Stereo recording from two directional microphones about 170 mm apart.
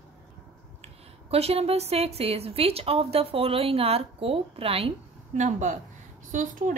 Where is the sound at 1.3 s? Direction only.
35° right (ahead or behind).